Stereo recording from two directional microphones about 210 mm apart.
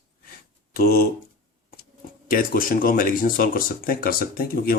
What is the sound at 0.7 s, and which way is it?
Speech, 45° left (ahead or behind).